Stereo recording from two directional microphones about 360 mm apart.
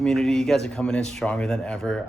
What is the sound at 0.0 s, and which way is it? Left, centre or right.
Speech, centre.